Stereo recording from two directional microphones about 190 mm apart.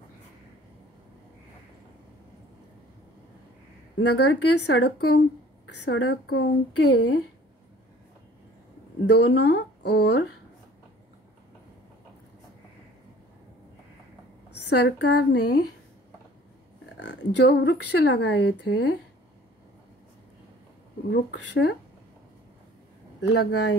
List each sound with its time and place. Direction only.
4.1 s speech: 65° left (ahead or behind)
9.0 s speech: 65° left (ahead or behind)
14.8 s speech: 60° left (ahead or behind)
16.9 s speech: 65° left (ahead or behind)
21.1 s speech: 60° left (ahead or behind)
23.2 s speech: 65° left (ahead or behind)